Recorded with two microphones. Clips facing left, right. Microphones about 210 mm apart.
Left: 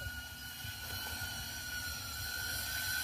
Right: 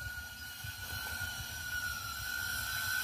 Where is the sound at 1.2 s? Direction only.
15° left (ahead or behind).